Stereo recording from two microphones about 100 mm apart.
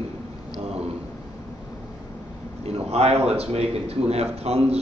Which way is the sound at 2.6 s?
90° right.